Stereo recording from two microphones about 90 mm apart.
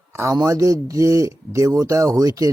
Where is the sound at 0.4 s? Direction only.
35° right (ahead or behind).